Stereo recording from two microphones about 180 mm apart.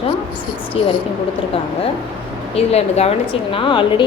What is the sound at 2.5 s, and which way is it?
A woman's voice, 35° left (ahead or behind).